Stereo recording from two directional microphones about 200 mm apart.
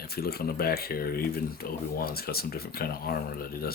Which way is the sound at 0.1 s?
50° left (ahead or behind).